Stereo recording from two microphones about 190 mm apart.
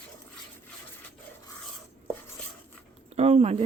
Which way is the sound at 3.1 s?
35° right (ahead or behind).